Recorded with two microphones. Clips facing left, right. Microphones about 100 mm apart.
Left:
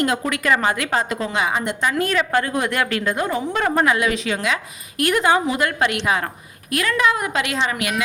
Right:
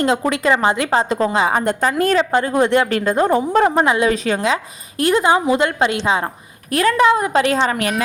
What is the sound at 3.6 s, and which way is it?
A woman's voice, 25° right (ahead or behind).